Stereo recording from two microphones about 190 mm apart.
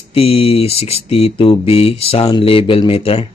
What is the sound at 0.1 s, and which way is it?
Speech, 30° left (ahead or behind).